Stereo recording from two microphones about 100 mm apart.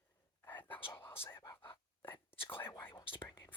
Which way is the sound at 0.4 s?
20° left (ahead or behind).